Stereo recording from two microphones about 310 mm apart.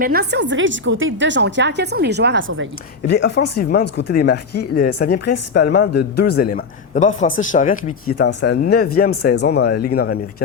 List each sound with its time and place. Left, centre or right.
0.0 s a woman's voice: right
3.1 s a man's voice: left